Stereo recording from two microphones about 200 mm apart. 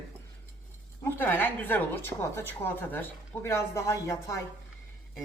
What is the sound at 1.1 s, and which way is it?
A woman's voice, 10° left (ahead or behind).